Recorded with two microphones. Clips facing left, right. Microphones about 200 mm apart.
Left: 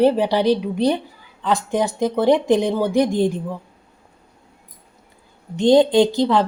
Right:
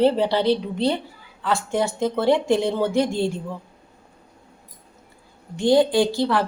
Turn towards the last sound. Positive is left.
turn(degrees=20)  # may be behind; listen again after turning